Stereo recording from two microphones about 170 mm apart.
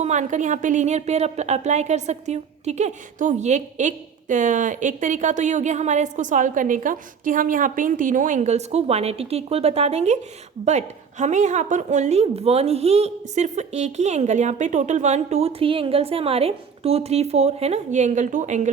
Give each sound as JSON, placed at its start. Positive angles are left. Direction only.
{"t": 0.0, "sound": "a woman's voice", "side_deg": -45}